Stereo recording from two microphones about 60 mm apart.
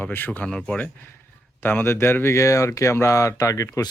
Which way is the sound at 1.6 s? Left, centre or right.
Left.